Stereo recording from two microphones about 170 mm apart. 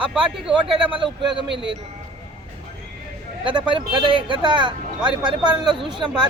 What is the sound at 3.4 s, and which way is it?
Speech, 30° right (ahead or behind).